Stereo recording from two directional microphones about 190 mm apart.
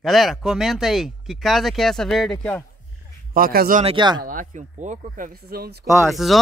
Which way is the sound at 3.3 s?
50° right (ahead or behind).